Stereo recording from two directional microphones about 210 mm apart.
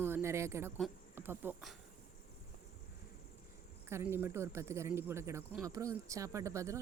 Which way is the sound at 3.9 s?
10° right (ahead or behind).